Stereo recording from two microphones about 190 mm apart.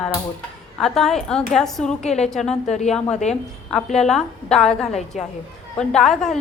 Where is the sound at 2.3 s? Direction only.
Centre (ahead or behind).